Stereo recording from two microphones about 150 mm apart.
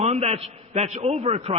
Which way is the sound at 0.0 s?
45° right (ahead or behind).